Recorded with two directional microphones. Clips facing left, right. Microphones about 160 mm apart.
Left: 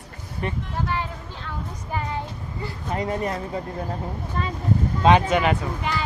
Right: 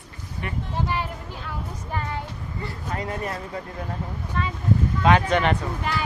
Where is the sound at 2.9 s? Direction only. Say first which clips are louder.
Left 5 dB; 20° left (ahead or behind).